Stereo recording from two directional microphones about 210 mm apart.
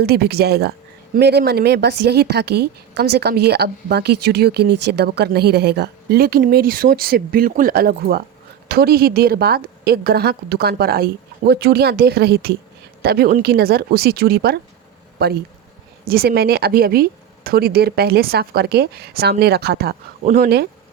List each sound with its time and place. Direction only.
0.0 s speech: 50° right (ahead or behind)